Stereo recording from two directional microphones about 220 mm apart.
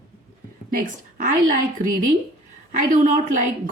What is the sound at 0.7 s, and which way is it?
Speech, 35° right (ahead or behind).